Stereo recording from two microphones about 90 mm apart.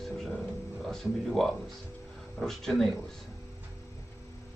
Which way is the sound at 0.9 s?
Centre (ahead or behind).